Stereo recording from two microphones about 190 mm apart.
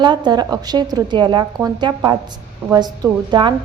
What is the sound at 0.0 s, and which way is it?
A woman's voice, 25° right (ahead or behind).